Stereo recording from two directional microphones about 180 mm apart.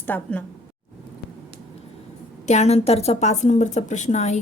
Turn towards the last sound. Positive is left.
turn(degrees=40)  # may be behind; listen again after turning